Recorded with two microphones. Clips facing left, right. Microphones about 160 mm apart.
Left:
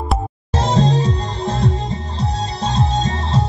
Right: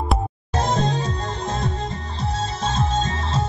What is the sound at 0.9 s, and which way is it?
Music, 80° left.